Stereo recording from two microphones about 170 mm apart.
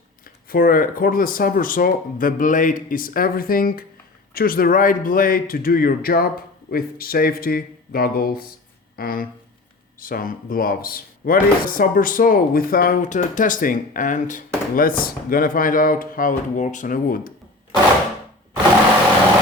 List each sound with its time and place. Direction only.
0.3 s speech: 60° left (ahead or behind)